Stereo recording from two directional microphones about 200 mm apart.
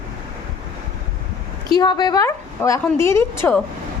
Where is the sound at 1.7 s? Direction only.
20° left (ahead or behind).